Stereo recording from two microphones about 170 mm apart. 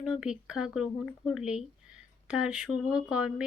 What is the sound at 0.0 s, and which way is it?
Speech, 5° right (ahead or behind).